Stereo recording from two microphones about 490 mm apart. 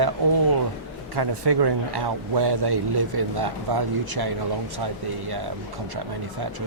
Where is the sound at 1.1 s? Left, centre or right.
Right.